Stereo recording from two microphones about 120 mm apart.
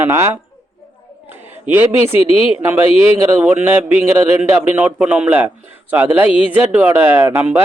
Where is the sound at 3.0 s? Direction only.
15° right (ahead or behind).